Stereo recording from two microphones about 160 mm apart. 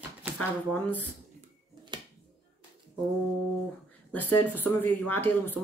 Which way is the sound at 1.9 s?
30° right (ahead or behind).